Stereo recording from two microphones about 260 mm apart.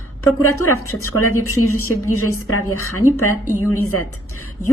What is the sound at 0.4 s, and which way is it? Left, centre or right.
A woman's voice, left.